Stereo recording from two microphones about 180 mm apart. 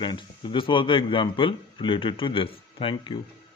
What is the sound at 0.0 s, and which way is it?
Speech, 25° left (ahead or behind).